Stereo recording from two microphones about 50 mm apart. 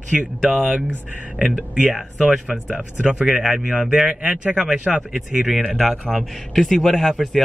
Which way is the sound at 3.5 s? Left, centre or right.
Right.